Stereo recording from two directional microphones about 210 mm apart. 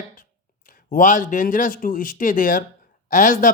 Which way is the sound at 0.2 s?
40° left (ahead or behind).